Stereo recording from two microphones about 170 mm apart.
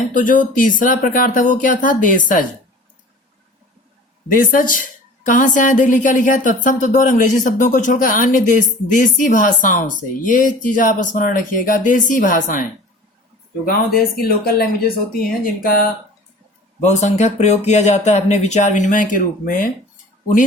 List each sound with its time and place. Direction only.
0.1 s a woman's voice: 50° left (ahead or behind)
4.3 s a woman's voice: 55° left (ahead or behind)
13.7 s speech: 60° left (ahead or behind)
16.8 s a woman's voice: 45° left (ahead or behind)